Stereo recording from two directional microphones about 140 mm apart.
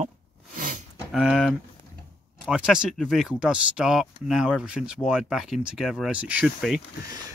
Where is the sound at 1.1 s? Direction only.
Centre (ahead or behind).